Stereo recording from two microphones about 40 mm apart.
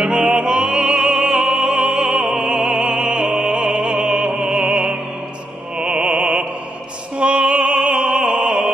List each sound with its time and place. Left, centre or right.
0.0 s opera: right